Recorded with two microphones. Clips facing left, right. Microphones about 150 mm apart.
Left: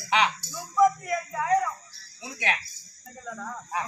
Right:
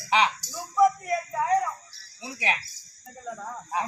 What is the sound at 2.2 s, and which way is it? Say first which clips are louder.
Music: right 1 dB; 35° right (ahead or behind).